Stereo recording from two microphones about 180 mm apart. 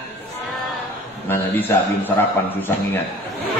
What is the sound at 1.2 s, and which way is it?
Speech, 15° left (ahead or behind).